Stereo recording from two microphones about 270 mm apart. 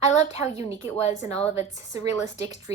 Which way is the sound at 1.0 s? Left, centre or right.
Centre.